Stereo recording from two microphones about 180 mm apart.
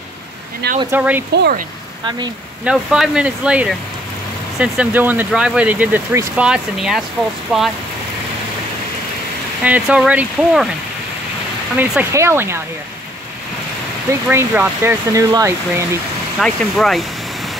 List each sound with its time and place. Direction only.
0.6 s speech: 65° right (ahead or behind)
0.9 s speech: 10° right (ahead or behind)
1.3 s speech: 65° right (ahead or behind)
2.0 s speech: 25° right (ahead or behind)
2.6 s speech: 5° right (ahead or behind)
9.6 s speech: 5° right (ahead or behind)
11.7 s speech: 10° right (ahead or behind)
14.2 s speech: 10° right (ahead or behind)
16.3 s speech: centre (ahead or behind)